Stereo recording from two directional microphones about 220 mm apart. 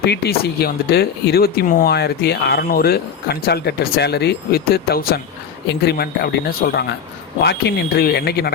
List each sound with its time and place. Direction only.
0.0 s speech: 50° left (ahead or behind)
7.9 s speech: 45° left (ahead or behind)